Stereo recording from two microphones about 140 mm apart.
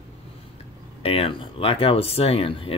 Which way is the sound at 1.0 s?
40° left (ahead or behind).